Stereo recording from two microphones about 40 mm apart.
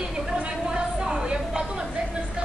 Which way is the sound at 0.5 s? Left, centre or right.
Right.